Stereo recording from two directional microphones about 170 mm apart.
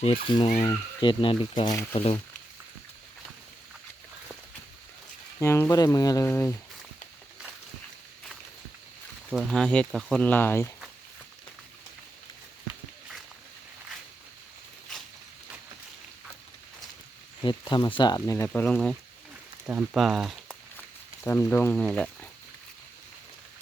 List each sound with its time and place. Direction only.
0.3 s speech: 30° left (ahead or behind)
1.7 s speech: 15° left (ahead or behind)
5.4 s speech: 15° left (ahead or behind)
9.3 s speech: centre (ahead or behind)
17.4 s speech: 30° left (ahead or behind)
18.4 s speech: 10° left (ahead or behind)
19.6 s speech: 10° right (ahead or behind)
21.2 s speech: 15° left (ahead or behind)